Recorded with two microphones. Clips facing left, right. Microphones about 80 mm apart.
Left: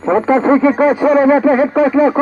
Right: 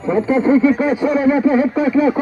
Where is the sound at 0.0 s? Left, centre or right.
Left.